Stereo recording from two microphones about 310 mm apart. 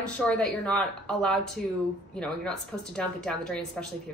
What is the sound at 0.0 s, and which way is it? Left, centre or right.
A woman's voice, centre.